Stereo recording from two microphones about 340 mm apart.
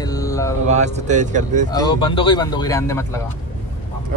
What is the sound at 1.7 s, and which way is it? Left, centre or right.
Speech, centre.